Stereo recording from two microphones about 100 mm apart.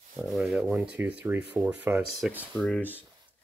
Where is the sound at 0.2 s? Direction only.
Centre (ahead or behind).